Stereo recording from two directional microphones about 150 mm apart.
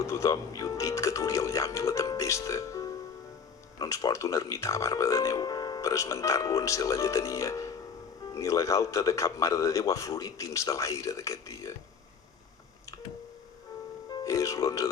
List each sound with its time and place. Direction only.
0.0 s speech: 20° left (ahead or behind)
14.1 s music: 25° left (ahead or behind)